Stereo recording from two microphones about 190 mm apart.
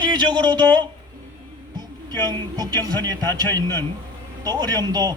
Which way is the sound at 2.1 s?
20° right (ahead or behind).